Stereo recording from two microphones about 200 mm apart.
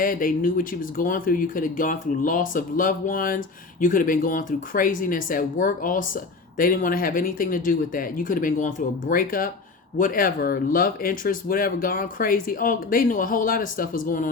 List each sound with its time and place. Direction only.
0.0 s speech: 45° left (ahead or behind)